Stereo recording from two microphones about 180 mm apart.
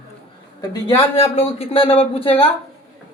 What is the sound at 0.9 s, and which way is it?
Speech, 35° left (ahead or behind).